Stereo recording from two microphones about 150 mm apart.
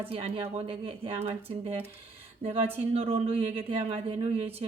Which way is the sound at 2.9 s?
40° right (ahead or behind).